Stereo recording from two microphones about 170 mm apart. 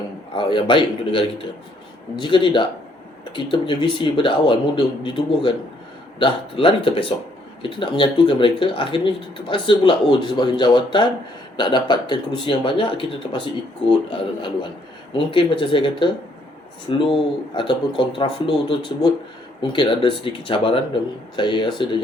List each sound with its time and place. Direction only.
0.3 s speech: 30° left (ahead or behind)